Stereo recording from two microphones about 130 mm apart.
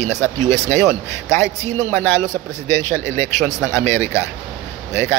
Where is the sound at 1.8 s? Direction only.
15° left (ahead or behind).